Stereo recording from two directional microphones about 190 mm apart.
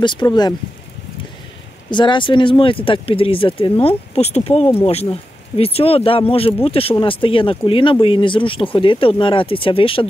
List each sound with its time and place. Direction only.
0.0 s speech: 25° left (ahead or behind)
1.9 s speech: 25° left (ahead or behind)